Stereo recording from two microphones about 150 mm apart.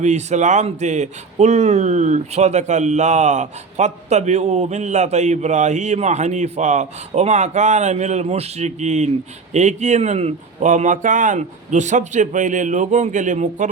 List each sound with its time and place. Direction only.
0.0 s speech: 50° right (ahead or behind)